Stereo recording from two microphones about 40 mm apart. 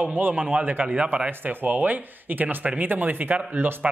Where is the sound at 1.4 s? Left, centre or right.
Right.